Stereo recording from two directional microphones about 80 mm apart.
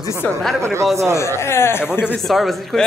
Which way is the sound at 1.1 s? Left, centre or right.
Left.